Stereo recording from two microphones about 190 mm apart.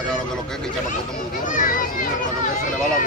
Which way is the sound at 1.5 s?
45° left (ahead or behind).